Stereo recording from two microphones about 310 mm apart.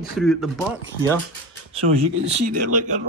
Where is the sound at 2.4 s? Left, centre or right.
Right.